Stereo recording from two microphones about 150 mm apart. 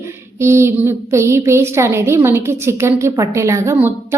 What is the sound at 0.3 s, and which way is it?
A woman's voice, 15° right (ahead or behind).